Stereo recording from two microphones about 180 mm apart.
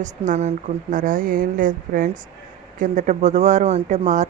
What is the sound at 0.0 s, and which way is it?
Speech, 40° right (ahead or behind).